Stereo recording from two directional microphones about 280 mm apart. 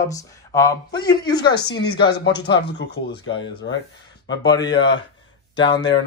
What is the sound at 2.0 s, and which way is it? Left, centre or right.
Speech, left.